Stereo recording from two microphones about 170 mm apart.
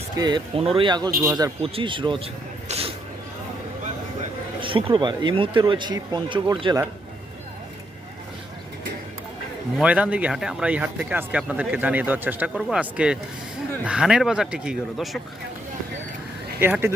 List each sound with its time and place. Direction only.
0.2 s speech: 25° right (ahead or behind)
1.6 s speech: 30° right (ahead or behind)
4.6 s speech: 30° right (ahead or behind)
9.7 s speech: 5° right (ahead or behind)
16.6 s speech: 10° right (ahead or behind)